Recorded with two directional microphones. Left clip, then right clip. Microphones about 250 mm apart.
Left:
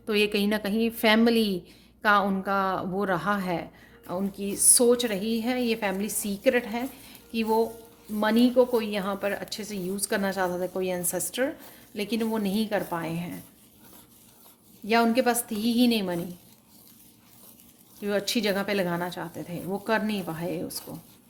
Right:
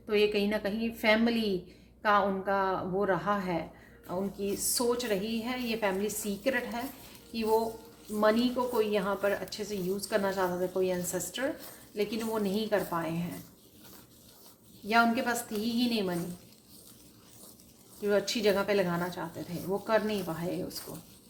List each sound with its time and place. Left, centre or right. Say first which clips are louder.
0.0 s a woman's voice: left 2 dB; left
8.2 s a woman's voice: left 5 dB; left
14.8 s a woman's voice: left 4 dB; left
18.0 s a woman's voice: left 1 dB; left